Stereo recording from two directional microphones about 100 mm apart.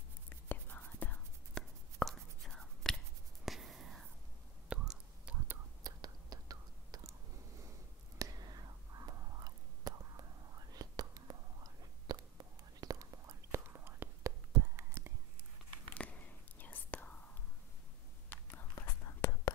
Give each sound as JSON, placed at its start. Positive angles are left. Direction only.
{"t": 0.5, "sound": "whispering", "side_deg": 20}
{"t": 5.9, "sound": "whispering", "side_deg": -40}
{"t": 15.9, "sound": "whispering", "side_deg": 15}
{"t": 18.9, "sound": "whispering", "side_deg": 30}